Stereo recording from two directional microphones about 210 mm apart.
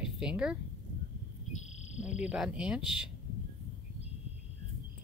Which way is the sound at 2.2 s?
5° right (ahead or behind).